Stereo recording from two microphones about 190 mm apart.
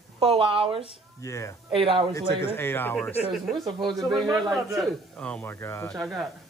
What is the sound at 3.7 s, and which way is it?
Speech, 25° right (ahead or behind).